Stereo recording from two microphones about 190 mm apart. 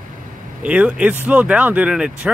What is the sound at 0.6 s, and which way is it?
Speech, 5° right (ahead or behind).